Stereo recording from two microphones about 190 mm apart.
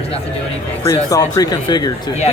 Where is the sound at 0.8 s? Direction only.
20° left (ahead or behind).